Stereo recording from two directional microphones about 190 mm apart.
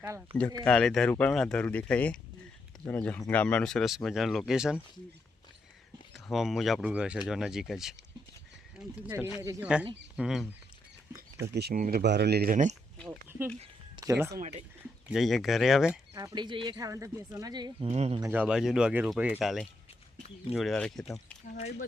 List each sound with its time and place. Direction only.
0.0 s speech: 10° right (ahead or behind)
0.3 s speech: 5° left (ahead or behind)
6.1 s speech: centre (ahead or behind)
11.4 s speech: 60° right (ahead or behind)
13.1 s speech: 10° right (ahead or behind)
15.1 s speech: centre (ahead or behind)
16.1 s speech: 20° right (ahead or behind)
17.8 s speech: 35° right (ahead or behind)
18.2 s speech: 10° right (ahead or behind)